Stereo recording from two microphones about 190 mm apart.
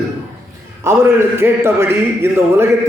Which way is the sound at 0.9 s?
15° right (ahead or behind).